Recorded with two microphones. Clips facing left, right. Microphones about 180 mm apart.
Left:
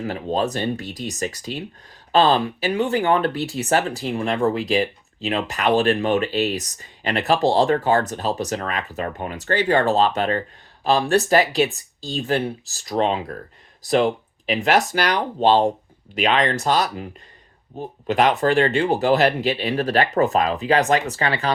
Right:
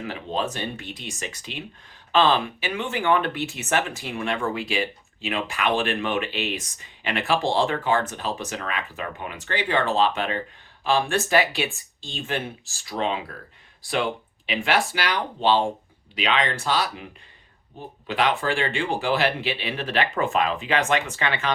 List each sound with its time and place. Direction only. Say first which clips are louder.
0.0 s speech: left 5 dB; 40° left (ahead or behind)